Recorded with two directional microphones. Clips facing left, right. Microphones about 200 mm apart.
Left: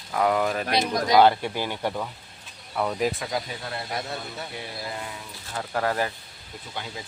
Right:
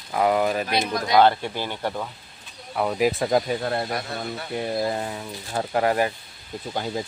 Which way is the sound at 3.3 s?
50° right (ahead or behind).